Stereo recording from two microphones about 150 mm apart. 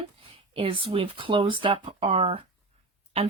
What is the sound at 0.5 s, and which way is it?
Speech, 35° right (ahead or behind).